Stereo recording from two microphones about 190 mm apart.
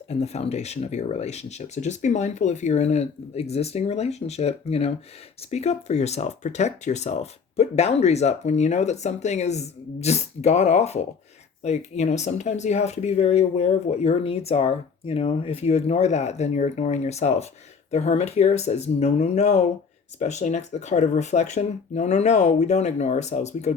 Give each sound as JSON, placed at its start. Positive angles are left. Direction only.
{"t": 0.1, "sound": "speech", "side_deg": 35}